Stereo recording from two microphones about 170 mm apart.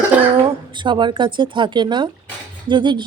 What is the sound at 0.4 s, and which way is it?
Speech, 25° right (ahead or behind).